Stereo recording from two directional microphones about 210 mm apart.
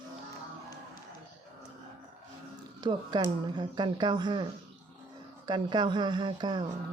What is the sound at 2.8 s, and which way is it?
Speech, 20° right (ahead or behind).